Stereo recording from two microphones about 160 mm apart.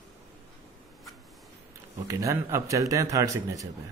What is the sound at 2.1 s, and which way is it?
Speech, 20° right (ahead or behind).